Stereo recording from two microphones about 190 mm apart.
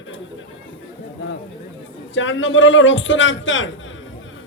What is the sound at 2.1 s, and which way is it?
A man's voice, 85° left.